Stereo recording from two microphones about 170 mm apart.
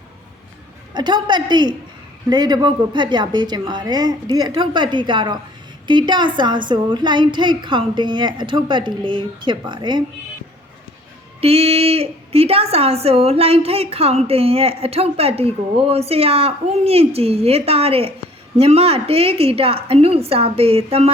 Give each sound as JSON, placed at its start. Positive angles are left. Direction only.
{"t": 0.9, "sound": "a woman's voice", "side_deg": -25}
{"t": 11.3, "sound": "a woman's voice", "side_deg": -35}